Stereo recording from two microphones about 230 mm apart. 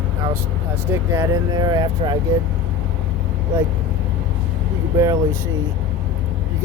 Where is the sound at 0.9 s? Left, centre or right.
Centre.